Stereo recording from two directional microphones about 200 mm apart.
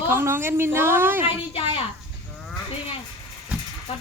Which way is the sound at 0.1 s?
10° right (ahead or behind).